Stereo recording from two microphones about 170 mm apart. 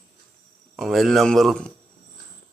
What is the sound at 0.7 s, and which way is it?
Speech, centre (ahead or behind).